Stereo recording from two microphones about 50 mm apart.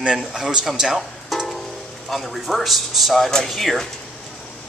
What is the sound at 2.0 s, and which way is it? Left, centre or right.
Speech, centre.